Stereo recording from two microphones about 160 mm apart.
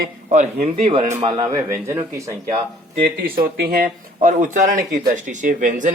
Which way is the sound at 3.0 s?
65° right (ahead or behind).